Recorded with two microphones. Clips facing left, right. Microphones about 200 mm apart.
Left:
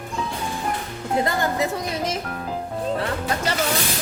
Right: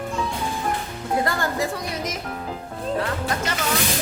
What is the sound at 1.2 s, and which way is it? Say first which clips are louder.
Speech: left 3 dB; 20° left (ahead or behind).